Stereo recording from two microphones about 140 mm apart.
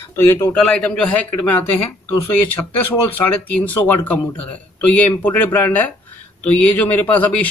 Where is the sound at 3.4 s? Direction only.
10° left (ahead or behind).